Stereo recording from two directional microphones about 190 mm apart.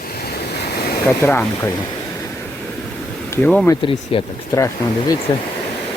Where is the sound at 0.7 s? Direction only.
55° left (ahead or behind).